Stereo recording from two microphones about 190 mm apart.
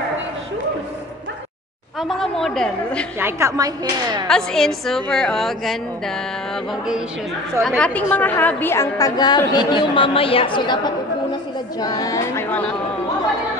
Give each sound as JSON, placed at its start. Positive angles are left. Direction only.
{"t": 2.0, "sound": "a woman's voice", "side_deg": 0}
{"t": 3.2, "sound": "a woman's voice", "side_deg": -15}
{"t": 4.3, "sound": "a woman's voice", "side_deg": 5}
{"t": 11.8, "sound": "speech", "side_deg": 20}